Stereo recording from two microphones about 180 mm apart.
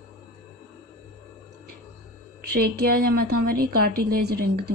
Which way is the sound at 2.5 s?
60° right (ahead or behind).